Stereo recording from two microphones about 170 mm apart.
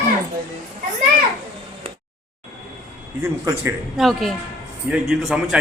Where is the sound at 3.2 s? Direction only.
15° right (ahead or behind).